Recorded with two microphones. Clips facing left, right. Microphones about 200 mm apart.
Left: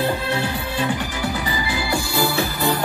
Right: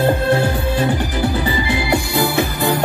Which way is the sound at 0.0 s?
50° right (ahead or behind).